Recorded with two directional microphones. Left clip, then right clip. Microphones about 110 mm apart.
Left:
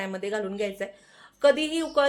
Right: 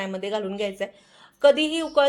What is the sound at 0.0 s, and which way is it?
A woman's voice, 20° right (ahead or behind).